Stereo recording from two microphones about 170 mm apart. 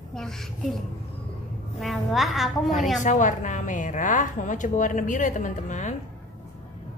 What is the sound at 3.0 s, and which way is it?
A woman's voice, 45° left (ahead or behind).